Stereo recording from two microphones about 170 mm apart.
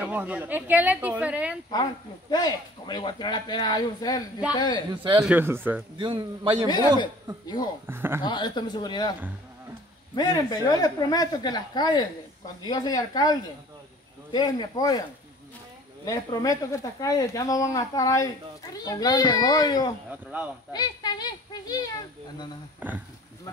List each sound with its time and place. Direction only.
0.0 s speech: 10° right (ahead or behind)
2.3 s speech: 25° left (ahead or behind)
5.2 s speech: 10° right (ahead or behind)
5.9 s a man's voice: 30° right (ahead or behind)
7.4 s speech: 25° left (ahead or behind)
7.8 s speech: 15° right (ahead or behind)
8.2 s speech: 25° left (ahead or behind)
10.1 s speech: 25° left (ahead or behind)
16.1 s speech: 20° left (ahead or behind)
20.1 s speech: 10° right (ahead or behind)
20.7 s speech: 25° left (ahead or behind)
22.8 s speech: 10° right (ahead or behind)